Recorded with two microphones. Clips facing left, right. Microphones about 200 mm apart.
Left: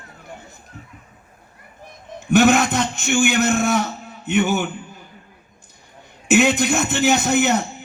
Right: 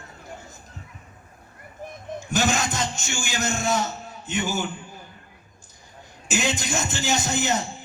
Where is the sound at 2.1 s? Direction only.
60° left (ahead or behind).